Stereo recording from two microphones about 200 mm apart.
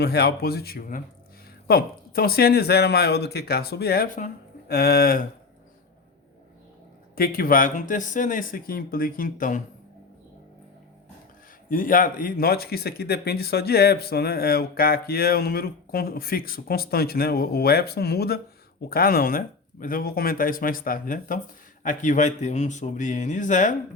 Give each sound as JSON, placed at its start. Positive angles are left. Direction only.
{"t": 0.0, "sound": "speech", "side_deg": 55}
{"t": 7.2, "sound": "speech", "side_deg": 45}
{"t": 11.7, "sound": "speech", "side_deg": 45}